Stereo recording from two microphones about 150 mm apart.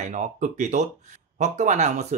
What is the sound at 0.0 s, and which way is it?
Speech, 55° right (ahead or behind).